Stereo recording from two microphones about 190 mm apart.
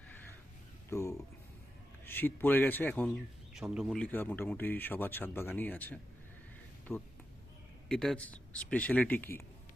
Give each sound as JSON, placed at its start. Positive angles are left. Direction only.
{"t": 0.9, "sound": "a sound", "side_deg": 15}
{"t": 2.0, "sound": "speech", "side_deg": 10}
{"t": 3.5, "sound": "speech", "side_deg": 0}